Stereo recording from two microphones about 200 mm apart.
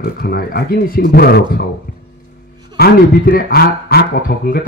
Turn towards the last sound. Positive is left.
turn(degrees=45)  # may be behind; listen again after turning